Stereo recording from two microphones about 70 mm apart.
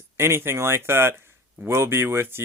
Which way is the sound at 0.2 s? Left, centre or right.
Right.